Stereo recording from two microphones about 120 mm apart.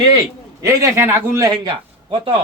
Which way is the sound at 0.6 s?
20° right (ahead or behind).